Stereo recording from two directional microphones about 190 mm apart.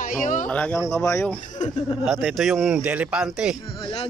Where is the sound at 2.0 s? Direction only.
Centre (ahead or behind).